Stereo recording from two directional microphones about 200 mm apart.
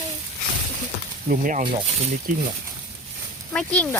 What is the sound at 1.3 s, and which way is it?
Speech, 40° right (ahead or behind).